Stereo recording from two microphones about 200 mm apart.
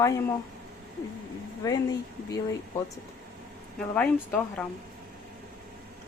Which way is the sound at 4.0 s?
5° left (ahead or behind).